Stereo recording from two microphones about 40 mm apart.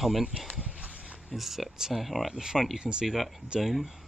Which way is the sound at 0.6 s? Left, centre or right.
Right.